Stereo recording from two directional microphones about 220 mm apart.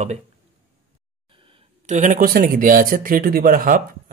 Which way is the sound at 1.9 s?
35° right (ahead or behind).